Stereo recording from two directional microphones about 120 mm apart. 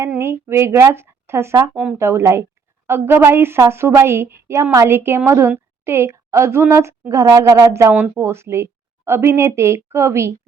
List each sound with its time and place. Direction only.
0.2 s a woman's voice: 20° right (ahead or behind)
1.7 s speech: 10° right (ahead or behind)
2.0 s a woman's voice: 25° right (ahead or behind)